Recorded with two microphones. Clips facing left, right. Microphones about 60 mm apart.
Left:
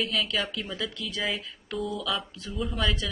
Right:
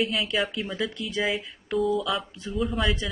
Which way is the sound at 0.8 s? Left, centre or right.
Right.